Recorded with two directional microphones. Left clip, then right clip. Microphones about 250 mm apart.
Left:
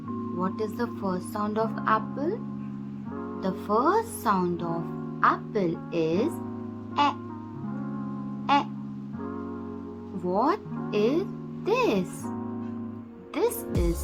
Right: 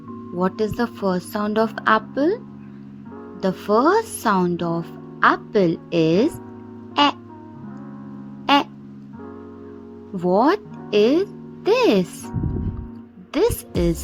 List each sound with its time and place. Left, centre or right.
0.3 s a woman's voice: right
3.4 s a woman's voice: right
8.5 s crow: right
10.2 s speech: right
13.3 s a woman's voice: right